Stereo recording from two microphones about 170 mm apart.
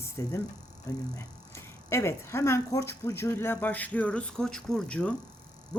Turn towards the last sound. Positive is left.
turn(degrees=5)  # may be behind; listen again after turning